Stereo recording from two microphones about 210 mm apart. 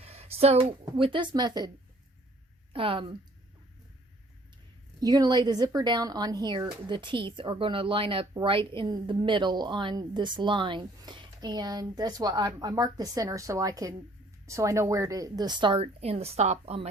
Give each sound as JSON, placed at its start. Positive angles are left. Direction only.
{"t": 0.0, "sound": "speech", "side_deg": -30}
{"t": 2.7, "sound": "speech", "side_deg": -25}
{"t": 4.9, "sound": "speech", "side_deg": -20}